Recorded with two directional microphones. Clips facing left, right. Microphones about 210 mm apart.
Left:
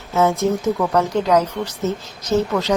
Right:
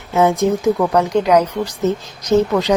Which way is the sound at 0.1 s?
15° right (ahead or behind).